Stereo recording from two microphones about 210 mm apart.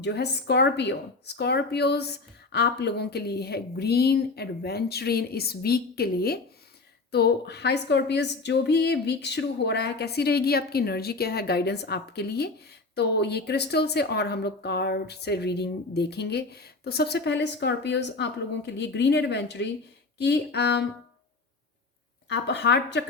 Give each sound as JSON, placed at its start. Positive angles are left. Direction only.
{"t": 0.0, "sound": "speech", "side_deg": 55}
{"t": 22.3, "sound": "speech", "side_deg": 55}